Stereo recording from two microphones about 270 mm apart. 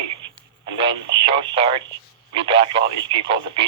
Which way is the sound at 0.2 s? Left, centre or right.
Right.